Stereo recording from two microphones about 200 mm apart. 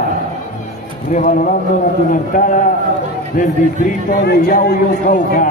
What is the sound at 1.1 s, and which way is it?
A man's voice, 40° left (ahead or behind).